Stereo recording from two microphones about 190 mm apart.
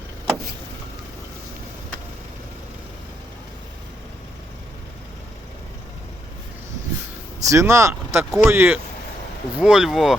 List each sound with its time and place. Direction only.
7.3 s speech: 15° right (ahead or behind)